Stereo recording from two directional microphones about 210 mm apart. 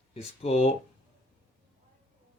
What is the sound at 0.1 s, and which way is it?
Speech, 30° left (ahead or behind).